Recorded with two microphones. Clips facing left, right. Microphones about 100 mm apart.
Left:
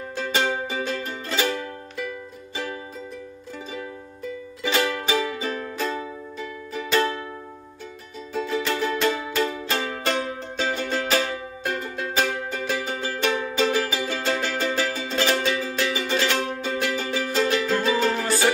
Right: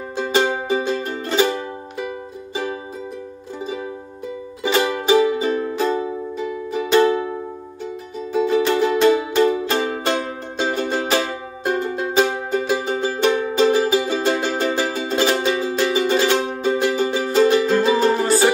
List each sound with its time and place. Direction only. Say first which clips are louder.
0.1 s music: right 5 dB; 20° right (ahead or behind)
5.0 s music: right 9 dB; 25° right (ahead or behind)
8.4 s music: right 8 dB; 25° right (ahead or behind)